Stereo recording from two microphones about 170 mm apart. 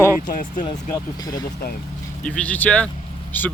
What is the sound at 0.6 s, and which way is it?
Speech, 25° left (ahead or behind).